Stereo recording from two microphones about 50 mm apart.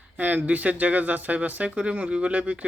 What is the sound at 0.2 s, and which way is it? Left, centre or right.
Speech, right.